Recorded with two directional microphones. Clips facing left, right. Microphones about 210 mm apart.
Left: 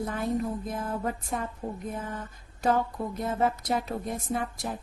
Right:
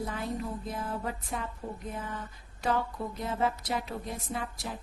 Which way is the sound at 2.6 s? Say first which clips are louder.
Left 4 dB; 45° left (ahead or behind).